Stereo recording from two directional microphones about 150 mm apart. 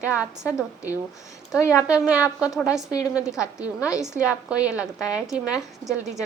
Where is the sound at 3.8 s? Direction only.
5° right (ahead or behind).